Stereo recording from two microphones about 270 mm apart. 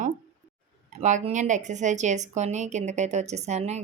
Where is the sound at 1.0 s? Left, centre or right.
Right.